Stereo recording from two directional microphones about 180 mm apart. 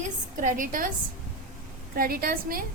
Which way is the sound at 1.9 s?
55° right (ahead or behind).